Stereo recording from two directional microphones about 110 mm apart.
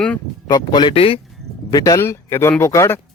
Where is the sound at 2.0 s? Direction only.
25° left (ahead or behind).